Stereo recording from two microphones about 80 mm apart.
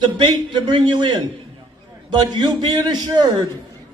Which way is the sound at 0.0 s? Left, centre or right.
Right.